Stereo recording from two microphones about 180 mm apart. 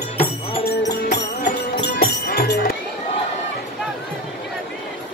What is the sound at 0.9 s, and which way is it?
Music, 65° left (ahead or behind).